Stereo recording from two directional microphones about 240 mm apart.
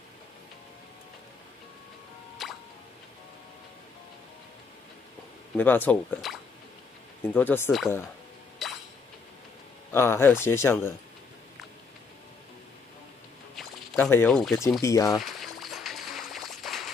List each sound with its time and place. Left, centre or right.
2.4 s music: centre
5.6 s speech: centre
8.6 s chink: centre
9.9 s speech: centre
13.6 s speech: centre
15.1 s a sound: centre